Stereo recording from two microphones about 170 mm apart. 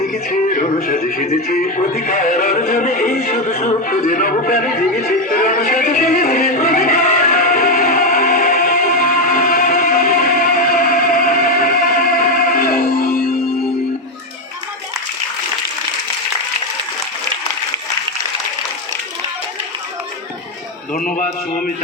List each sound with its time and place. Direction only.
0.3 s speech: 55° left (ahead or behind)
7.9 s music: 55° left (ahead or behind)
20.9 s a sound: 55° left (ahead or behind)